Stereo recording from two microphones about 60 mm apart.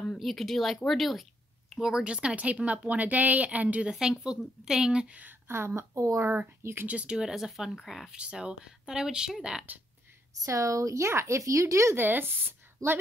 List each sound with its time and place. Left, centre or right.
0.2 s speech: centre; by 3.9 s right
3.9 s speech: centre
5.0 s speech: right
5.8 s speech: right
6.6 s speech: right
6.9 s speech: centre
8.1 s speech: centre
10.4 s speech: right
11.9 s a woman's voice: right